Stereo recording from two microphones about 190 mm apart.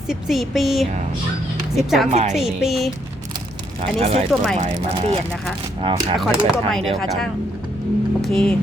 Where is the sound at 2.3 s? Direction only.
Centre (ahead or behind).